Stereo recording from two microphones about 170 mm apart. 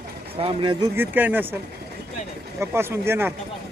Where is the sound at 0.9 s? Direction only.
10° right (ahead or behind).